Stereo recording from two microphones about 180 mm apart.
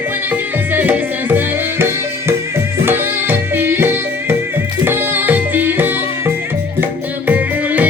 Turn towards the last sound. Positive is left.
turn(degrees=-10)  # may be behind; listen again after turning